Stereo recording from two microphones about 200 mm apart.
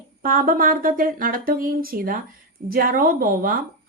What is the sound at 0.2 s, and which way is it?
A woman's voice, 45° right (ahead or behind).